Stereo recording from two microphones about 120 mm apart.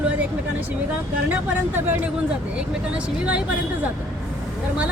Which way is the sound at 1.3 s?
15° right (ahead or behind).